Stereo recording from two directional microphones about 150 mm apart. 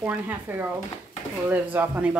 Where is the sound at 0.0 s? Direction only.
10° right (ahead or behind).